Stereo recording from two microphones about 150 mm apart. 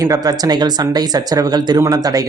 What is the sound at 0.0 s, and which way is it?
Speech, 25° right (ahead or behind).